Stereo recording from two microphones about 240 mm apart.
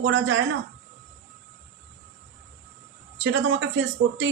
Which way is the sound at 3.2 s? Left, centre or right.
Right.